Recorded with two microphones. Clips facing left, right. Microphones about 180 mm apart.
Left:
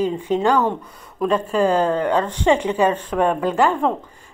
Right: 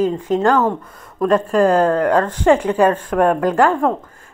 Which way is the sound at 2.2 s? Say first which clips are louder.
Right 3 dB; 10° right (ahead or behind).